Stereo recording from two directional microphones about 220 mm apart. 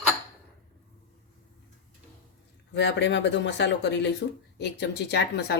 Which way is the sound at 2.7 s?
50° left (ahead or behind).